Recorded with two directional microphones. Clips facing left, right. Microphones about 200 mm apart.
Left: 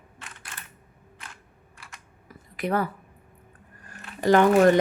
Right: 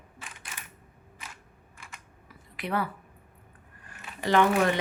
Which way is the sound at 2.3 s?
45° left (ahead or behind).